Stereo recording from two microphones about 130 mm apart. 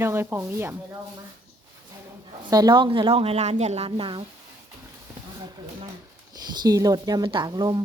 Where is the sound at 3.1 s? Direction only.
50° right (ahead or behind).